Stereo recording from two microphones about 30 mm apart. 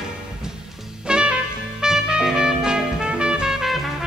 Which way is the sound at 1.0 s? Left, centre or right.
Right.